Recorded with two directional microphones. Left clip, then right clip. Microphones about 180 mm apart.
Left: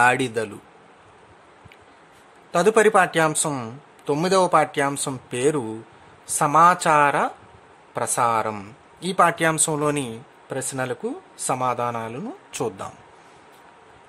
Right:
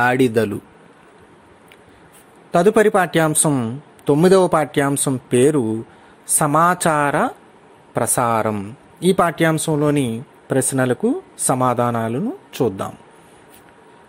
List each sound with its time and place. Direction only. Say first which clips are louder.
0.0 s speech: right 3 dB; 15° right (ahead or behind)
2.5 s speech: right 2 dB; 20° right (ahead or behind)
10.5 s speech: right 9 dB; 25° right (ahead or behind)
12.2 s speech: right 7 dB; 10° right (ahead or behind)